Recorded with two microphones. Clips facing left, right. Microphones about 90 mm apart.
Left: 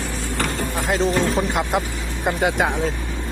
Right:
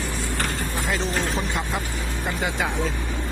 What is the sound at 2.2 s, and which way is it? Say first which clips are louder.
Speech: left 7 dB; 60° left (ahead or behind).